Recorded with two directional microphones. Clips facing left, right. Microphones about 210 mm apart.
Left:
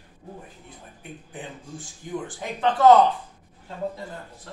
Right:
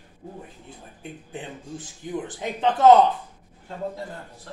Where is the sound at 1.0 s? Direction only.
25° right (ahead or behind).